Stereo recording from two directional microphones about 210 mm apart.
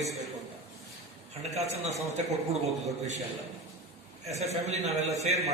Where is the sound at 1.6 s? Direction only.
30° right (ahead or behind).